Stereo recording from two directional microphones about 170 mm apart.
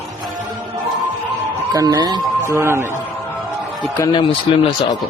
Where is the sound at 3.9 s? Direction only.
20° left (ahead or behind).